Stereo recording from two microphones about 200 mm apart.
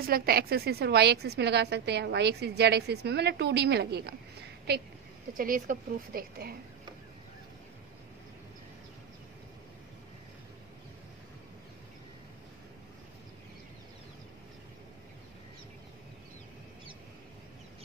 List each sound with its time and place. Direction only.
0.0 s a woman's voice: 50° right (ahead or behind)